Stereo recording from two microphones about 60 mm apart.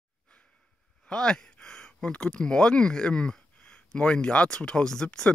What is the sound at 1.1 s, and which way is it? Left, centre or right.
Speech, centre.